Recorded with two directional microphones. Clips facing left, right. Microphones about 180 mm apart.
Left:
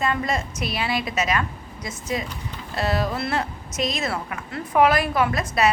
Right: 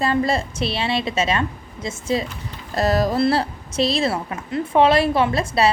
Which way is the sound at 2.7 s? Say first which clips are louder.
Right 5 dB; 40° right (ahead or behind).